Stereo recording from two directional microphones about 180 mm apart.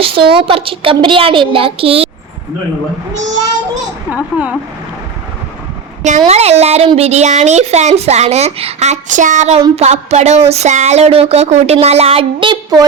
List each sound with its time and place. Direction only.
0.0 s a child's voice: 30° right (ahead or behind)
4.1 s speech: 10° right (ahead or behind)
6.0 s speech: 40° right (ahead or behind)